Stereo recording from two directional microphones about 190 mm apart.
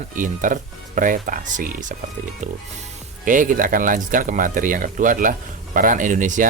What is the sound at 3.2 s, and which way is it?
Speech, 45° right (ahead or behind).